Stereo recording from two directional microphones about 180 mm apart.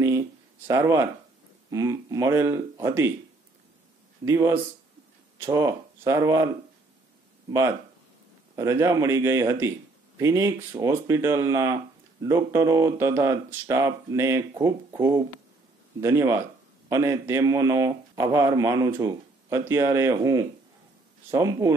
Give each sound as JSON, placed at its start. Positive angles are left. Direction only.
{"t": 0.7, "sound": "speech", "side_deg": -15}
{"t": 4.2, "sound": "speech", "side_deg": -15}
{"t": 8.5, "sound": "speech", "side_deg": -15}